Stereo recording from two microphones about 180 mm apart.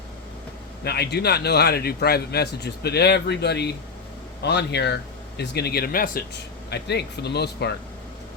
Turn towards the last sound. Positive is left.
turn(degrees=70)  # may be behind; listen again after turning